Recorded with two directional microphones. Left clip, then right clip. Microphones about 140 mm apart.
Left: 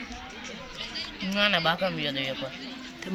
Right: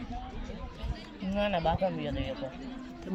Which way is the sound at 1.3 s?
25° left (ahead or behind).